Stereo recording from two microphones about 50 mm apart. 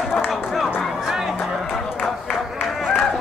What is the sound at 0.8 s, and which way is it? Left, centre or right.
Music, centre.